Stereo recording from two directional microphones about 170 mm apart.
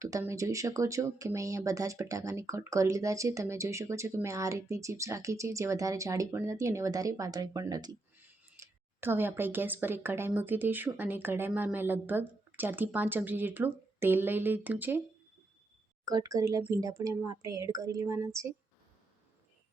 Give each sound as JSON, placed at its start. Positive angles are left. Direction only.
{"t": 0.0, "sound": "speech", "side_deg": -20}
{"t": 16.0, "sound": "speech", "side_deg": -20}